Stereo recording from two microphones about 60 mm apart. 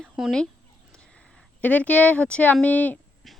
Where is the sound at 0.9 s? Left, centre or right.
Centre.